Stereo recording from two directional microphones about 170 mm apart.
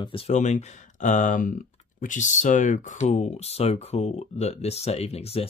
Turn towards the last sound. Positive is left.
turn(degrees=35)  # may be behind; listen again after turning